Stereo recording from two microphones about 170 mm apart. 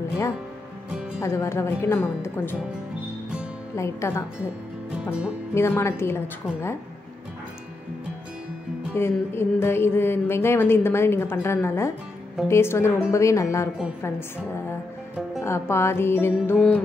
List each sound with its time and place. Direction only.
1.2 s music: 15° left (ahead or behind)
3.7 s music: 15° left (ahead or behind)
5.5 s music: 15° left (ahead or behind)
8.9 s music: 15° left (ahead or behind)
15.4 s music: 15° left (ahead or behind)